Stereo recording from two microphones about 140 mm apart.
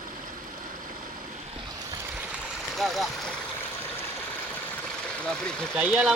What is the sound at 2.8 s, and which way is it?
Speech, centre (ahead or behind).